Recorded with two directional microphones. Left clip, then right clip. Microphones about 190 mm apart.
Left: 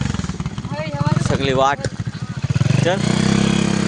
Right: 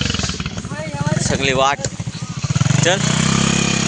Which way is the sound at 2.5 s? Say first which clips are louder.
Right 2 dB; 45° left (ahead or behind).